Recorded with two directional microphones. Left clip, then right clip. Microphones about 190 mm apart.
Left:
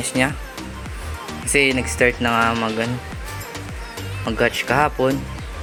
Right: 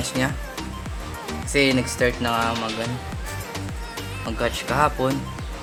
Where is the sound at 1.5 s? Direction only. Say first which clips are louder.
Left 3 dB; 20° left (ahead or behind).